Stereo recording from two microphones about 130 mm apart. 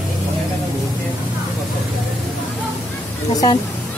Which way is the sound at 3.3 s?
35° left (ahead or behind).